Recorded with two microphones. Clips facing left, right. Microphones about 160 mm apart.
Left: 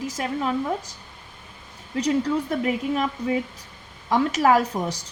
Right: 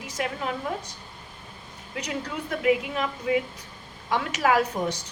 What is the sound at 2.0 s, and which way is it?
A woman's voice, 35° left (ahead or behind).